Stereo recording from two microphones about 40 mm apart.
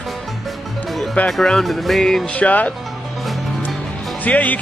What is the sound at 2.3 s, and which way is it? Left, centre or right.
Speech, left.